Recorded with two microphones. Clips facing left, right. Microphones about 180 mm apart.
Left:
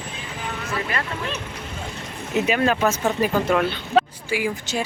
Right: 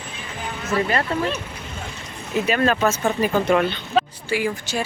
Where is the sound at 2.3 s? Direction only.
20° left (ahead or behind).